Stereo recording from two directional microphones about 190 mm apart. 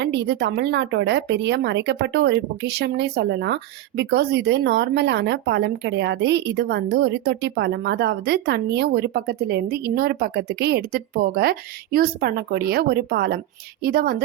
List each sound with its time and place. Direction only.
0.0 s a woman's voice: 65° right (ahead or behind)